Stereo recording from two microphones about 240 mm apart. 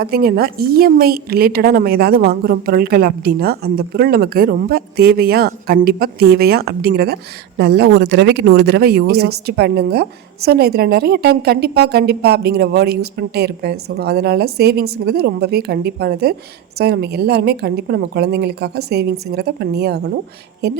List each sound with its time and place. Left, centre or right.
0.0 s a woman's voice: right